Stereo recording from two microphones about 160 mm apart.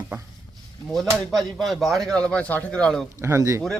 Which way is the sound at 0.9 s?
Centre (ahead or behind).